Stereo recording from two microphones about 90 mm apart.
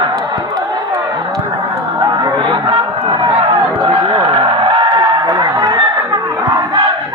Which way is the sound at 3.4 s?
55° right (ahead or behind).